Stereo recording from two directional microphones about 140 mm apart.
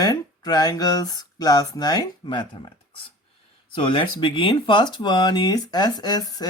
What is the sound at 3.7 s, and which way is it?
Speech, 35° left (ahead or behind).